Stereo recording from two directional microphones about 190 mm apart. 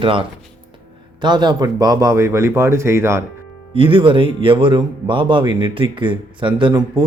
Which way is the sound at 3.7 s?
30° right (ahead or behind).